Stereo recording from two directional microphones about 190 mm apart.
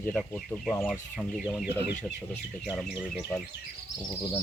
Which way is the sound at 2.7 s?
5° right (ahead or behind).